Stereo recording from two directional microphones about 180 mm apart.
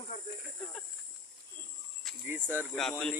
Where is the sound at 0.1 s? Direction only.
40° left (ahead or behind).